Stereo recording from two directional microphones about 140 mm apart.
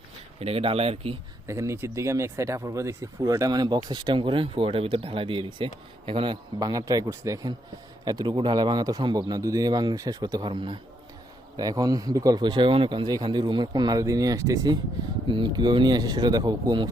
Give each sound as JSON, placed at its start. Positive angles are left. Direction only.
{"t": 0.3, "sound": "speech", "side_deg": -45}
{"t": 1.5, "sound": "speech", "side_deg": -20}